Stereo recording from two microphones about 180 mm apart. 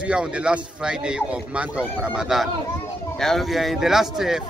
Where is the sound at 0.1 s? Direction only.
5° right (ahead or behind).